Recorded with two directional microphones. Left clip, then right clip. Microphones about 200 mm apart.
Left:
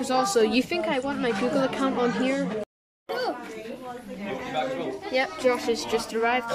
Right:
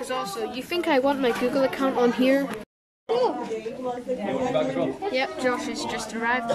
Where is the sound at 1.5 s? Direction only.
5° right (ahead or behind).